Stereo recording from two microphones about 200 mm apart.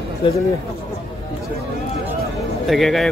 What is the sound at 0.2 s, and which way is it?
Speech, 25° left (ahead or behind).